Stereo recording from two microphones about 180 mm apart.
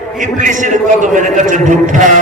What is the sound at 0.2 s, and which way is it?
A man's voice, 45° right (ahead or behind).